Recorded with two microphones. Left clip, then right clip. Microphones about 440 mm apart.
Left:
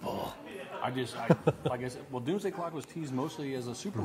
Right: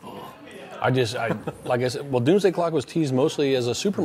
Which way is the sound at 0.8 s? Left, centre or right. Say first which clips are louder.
Right 12 dB; right.